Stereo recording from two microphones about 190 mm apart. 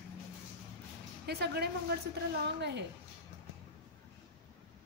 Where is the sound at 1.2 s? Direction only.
60° right (ahead or behind).